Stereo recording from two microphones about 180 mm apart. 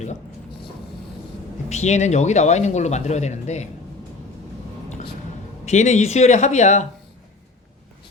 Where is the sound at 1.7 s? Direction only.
40° left (ahead or behind).